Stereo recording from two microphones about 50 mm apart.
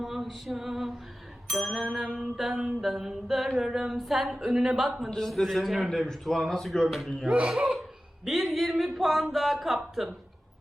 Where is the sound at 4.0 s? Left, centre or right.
Centre.